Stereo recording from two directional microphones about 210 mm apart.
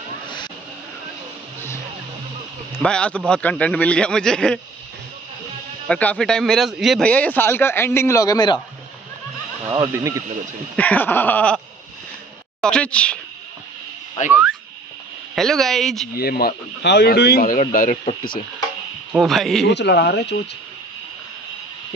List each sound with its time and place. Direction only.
2.7 s a man's voice: 5° left (ahead or behind)
5.9 s a man's voice: 5° left (ahead or behind)
9.7 s speech: 15° right (ahead or behind)
10.8 s a man's voice: 10° left (ahead or behind)
12.6 s a man's voice: 5° left (ahead or behind)
15.3 s a man's voice: centre (ahead or behind)
16.2 s speech: 45° left (ahead or behind)
19.1 s a man's voice: centre (ahead or behind)
19.6 s speech: 55° left (ahead or behind)